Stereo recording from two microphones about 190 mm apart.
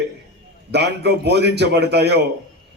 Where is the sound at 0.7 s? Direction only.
60° right (ahead or behind).